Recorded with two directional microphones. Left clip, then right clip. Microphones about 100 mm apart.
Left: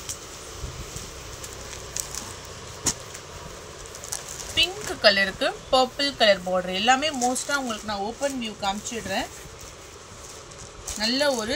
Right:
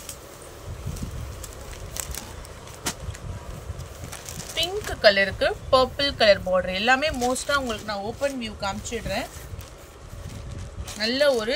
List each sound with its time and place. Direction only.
4.6 s a sound: 55° right (ahead or behind)
5.4 s a woman's voice: 40° right (ahead or behind)
11.0 s speech: 60° right (ahead or behind)